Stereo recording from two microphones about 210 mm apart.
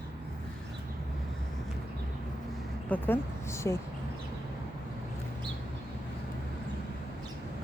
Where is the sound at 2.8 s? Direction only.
10° left (ahead or behind).